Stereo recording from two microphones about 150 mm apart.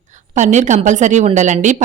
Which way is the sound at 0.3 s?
55° right (ahead or behind).